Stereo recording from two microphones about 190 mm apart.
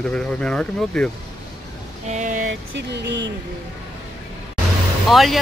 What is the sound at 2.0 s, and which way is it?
Vehicle, 40° right (ahead or behind).